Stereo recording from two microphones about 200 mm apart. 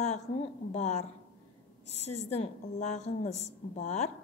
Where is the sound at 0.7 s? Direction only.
35° left (ahead or behind).